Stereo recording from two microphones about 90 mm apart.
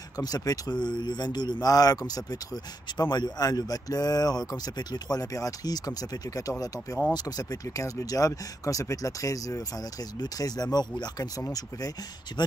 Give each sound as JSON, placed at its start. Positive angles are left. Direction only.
{"t": 0.2, "sound": "speech", "side_deg": 45}
{"t": 12.3, "sound": "speech", "side_deg": 55}